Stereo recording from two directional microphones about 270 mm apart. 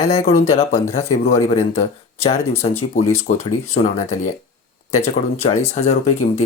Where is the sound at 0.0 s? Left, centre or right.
Left.